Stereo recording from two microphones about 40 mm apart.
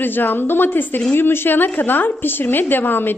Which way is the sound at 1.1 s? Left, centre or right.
Left.